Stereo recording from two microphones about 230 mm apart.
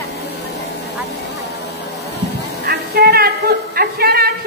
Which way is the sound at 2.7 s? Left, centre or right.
Right.